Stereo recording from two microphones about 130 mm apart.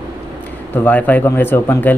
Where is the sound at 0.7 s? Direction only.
15° left (ahead or behind).